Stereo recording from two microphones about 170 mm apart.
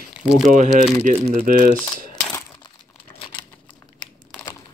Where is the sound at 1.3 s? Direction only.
55° right (ahead or behind).